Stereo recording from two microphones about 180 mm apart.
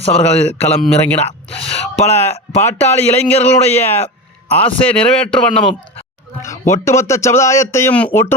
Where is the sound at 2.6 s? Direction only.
15° left (ahead or behind).